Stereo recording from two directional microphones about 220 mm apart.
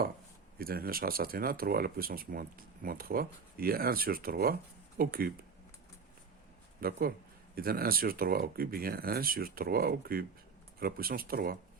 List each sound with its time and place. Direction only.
0.6 s speech: 40° right (ahead or behind)
6.7 s speech: 40° right (ahead or behind)